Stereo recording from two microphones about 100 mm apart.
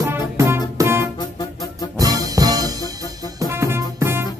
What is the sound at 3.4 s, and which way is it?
Music, 25° right (ahead or behind).